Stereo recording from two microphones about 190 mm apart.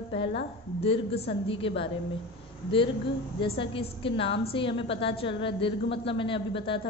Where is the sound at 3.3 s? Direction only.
25° left (ahead or behind).